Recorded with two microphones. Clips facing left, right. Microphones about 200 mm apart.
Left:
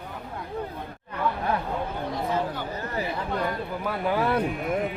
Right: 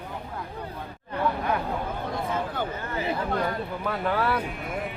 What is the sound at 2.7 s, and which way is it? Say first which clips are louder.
Chatter: left 1 dB; 40° left (ahead or behind).